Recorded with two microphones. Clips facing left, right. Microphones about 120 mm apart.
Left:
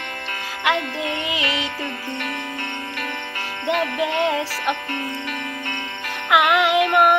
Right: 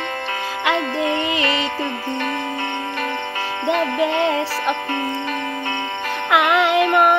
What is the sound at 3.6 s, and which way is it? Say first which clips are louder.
Music: right 2 dB; 35° right (ahead or behind).